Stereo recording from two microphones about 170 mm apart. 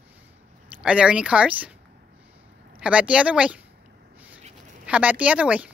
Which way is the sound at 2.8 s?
5° right (ahead or behind).